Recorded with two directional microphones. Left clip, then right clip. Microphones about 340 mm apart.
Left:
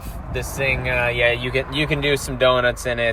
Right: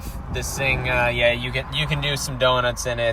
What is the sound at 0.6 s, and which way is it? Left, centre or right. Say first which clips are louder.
Speech: left 1 dB; left.